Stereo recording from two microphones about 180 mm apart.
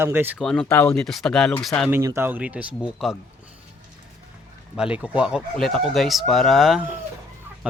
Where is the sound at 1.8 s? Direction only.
15° right (ahead or behind).